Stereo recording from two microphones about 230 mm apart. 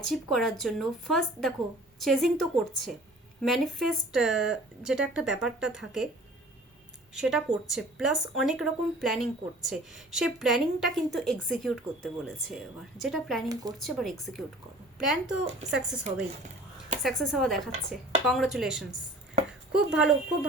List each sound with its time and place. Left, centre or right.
0.1 s a woman's voice: centre
7.1 s a woman's voice: centre
13.5 s speech: centre
13.7 s a woman's voice: centre
17.0 s a woman's voice: centre